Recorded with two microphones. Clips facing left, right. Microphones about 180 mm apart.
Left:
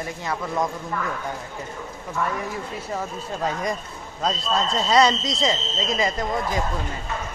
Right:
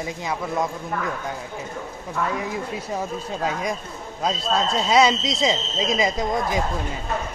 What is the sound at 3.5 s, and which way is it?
Speech, 5° right (ahead or behind).